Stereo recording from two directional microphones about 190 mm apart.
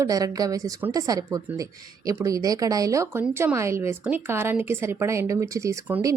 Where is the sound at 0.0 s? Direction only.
20° right (ahead or behind).